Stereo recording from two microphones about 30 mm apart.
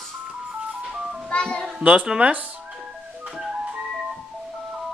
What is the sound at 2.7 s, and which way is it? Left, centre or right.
Music, centre.